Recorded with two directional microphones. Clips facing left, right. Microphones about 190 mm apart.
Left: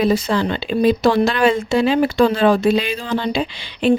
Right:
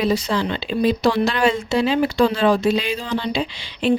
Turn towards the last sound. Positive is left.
turn(degrees=55)  # may be behind; listen again after turning